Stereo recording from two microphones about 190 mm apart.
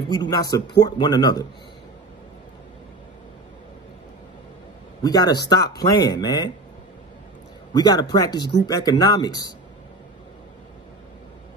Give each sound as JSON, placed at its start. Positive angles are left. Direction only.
{"t": 0.1, "sound": "speech", "side_deg": 20}
{"t": 5.0, "sound": "speech", "side_deg": 20}
{"t": 7.7, "sound": "speech", "side_deg": 20}